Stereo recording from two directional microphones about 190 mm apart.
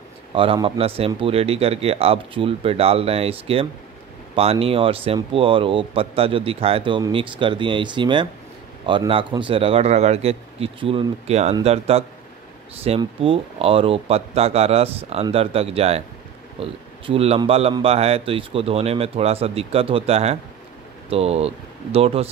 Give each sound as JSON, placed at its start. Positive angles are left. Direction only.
{"t": 0.3, "sound": "a man's voice", "side_deg": -30}